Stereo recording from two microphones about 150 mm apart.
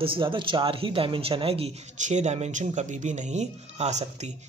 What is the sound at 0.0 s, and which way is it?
Speech, 35° right (ahead or behind).